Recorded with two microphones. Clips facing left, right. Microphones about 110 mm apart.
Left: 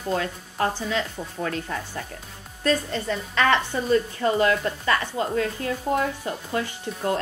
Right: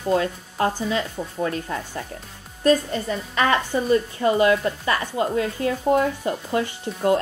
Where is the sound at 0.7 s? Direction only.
10° right (ahead or behind).